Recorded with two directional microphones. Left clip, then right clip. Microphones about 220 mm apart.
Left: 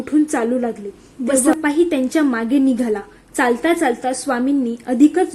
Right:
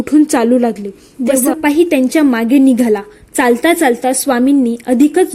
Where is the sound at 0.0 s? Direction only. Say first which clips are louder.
Right 6 dB; 45° right (ahead or behind).